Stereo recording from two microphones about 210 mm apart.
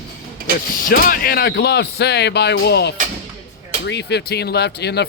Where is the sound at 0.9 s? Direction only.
45° left (ahead or behind).